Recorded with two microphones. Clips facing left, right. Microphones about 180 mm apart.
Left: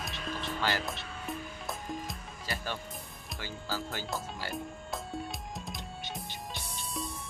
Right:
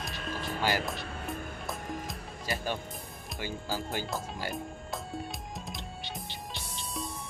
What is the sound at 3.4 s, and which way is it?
Speech, 15° right (ahead or behind).